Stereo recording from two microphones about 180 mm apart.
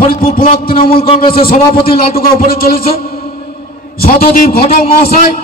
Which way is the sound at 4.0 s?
55° left (ahead or behind).